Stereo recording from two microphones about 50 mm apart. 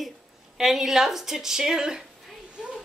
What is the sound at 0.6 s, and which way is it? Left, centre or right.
A woman's voice, centre.